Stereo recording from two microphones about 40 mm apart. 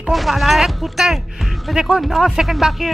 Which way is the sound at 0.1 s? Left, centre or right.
Centre.